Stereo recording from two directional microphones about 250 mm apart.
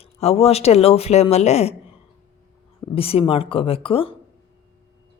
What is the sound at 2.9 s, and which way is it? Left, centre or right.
A woman's voice, left.